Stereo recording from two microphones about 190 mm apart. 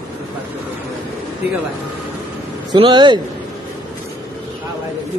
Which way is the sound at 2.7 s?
25° right (ahead or behind).